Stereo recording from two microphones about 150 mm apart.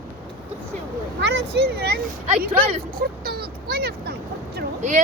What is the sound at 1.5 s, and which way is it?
Speech, 90° right.